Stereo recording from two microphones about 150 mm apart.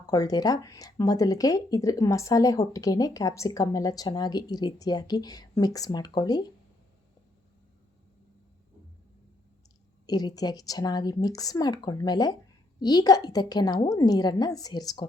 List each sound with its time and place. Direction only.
0.1 s speech: 25° left (ahead or behind)
10.1 s speech: 25° left (ahead or behind)